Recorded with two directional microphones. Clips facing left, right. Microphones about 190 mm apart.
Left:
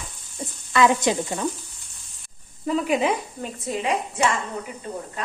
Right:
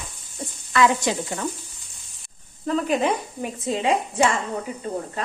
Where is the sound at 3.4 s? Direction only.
25° right (ahead or behind).